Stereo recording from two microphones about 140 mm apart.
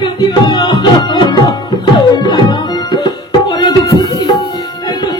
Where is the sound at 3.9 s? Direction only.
30° left (ahead or behind).